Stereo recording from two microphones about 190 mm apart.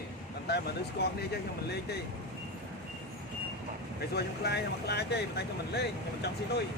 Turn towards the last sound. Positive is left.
turn(degrees=60)  # may be behind; listen again after turning